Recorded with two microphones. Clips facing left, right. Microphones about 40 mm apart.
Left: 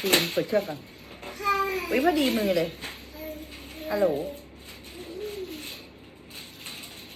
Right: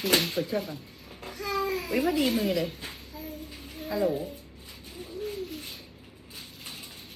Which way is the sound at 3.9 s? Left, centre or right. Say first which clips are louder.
Left 3 dB; left.